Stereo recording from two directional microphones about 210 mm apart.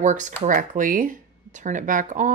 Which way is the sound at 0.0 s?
35° right (ahead or behind).